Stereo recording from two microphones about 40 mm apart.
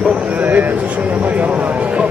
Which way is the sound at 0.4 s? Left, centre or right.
Right.